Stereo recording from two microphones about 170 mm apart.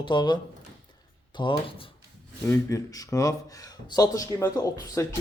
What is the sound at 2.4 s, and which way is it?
Speech, 20° left (ahead or behind).